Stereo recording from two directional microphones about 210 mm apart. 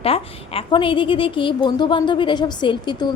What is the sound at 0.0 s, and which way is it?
A woman's voice, 25° left (ahead or behind).